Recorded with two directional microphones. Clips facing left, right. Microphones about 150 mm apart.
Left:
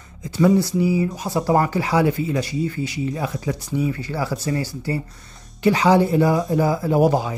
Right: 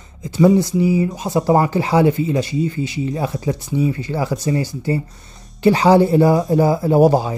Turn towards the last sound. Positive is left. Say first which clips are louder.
# right 4 dB
turn(degrees=-35)  # may be behind; listen again after turning